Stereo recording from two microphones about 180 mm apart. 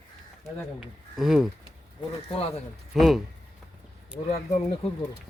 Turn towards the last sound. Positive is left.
turn(degrees=35)  # may be behind; listen again after turning